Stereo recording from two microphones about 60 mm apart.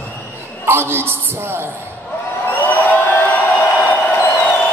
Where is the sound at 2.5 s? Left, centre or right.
Left.